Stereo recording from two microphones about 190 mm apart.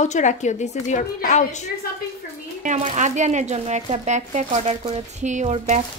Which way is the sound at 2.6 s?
40° right (ahead or behind).